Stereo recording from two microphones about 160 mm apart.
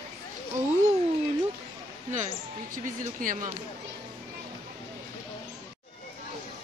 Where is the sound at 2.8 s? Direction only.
55° right (ahead or behind).